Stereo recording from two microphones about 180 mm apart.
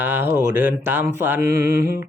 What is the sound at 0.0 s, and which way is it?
Music, 10° right (ahead or behind).